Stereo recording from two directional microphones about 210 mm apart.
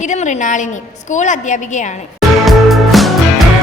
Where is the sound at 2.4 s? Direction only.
Centre (ahead or behind).